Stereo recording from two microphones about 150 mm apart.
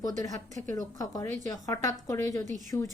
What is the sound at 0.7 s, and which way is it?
A woman's voice, 25° left (ahead or behind).